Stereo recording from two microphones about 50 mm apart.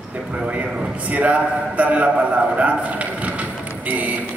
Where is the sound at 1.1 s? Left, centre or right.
Right.